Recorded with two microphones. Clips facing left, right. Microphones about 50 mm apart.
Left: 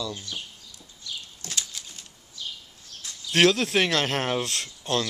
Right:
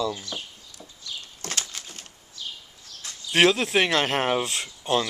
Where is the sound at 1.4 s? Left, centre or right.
Right.